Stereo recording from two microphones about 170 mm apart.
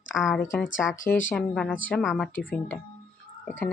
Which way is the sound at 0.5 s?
15° left (ahead or behind).